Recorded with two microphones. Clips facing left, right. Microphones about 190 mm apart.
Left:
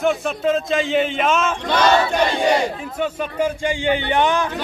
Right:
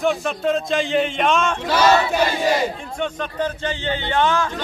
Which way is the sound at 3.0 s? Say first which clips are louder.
Left 3 dB; 10° left (ahead or behind).